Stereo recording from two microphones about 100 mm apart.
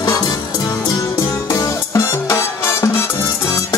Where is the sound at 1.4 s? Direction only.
35° left (ahead or behind).